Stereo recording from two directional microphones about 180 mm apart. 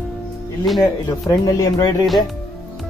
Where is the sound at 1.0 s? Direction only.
20° left (ahead or behind).